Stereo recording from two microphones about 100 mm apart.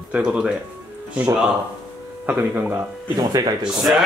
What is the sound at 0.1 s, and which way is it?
Speech, 10° right (ahead or behind).